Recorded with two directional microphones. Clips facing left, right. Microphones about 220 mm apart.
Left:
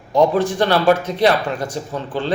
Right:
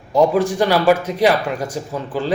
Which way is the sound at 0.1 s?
10° right (ahead or behind).